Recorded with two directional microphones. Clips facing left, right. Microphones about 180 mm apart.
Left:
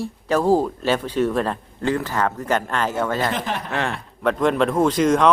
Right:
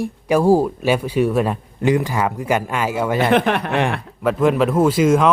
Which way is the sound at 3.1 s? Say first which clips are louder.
Right 8 dB; 65° right (ahead or behind).